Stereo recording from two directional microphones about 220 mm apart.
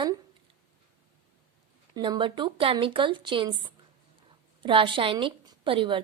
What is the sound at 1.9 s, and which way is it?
A woman's voice, 20° right (ahead or behind).